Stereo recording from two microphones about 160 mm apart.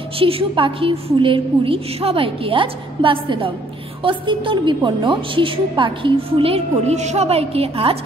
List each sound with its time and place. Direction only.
0.2 s a woman's voice: 35° right (ahead or behind)